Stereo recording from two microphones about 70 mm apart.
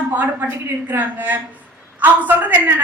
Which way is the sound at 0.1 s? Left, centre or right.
Right.